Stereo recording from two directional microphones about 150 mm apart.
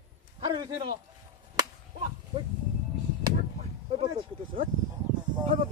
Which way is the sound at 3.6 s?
40° right (ahead or behind).